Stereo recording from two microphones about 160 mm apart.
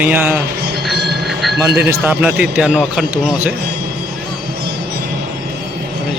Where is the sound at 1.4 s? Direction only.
Centre (ahead or behind).